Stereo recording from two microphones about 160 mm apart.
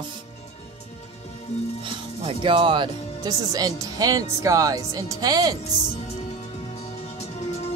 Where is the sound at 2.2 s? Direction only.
30° right (ahead or behind).